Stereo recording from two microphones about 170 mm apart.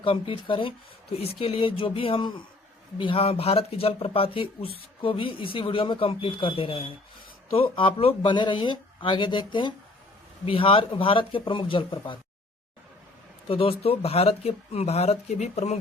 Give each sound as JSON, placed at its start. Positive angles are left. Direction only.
{"t": 0.0, "sound": "speech", "side_deg": 30}
{"t": 13.5, "sound": "speech", "side_deg": 35}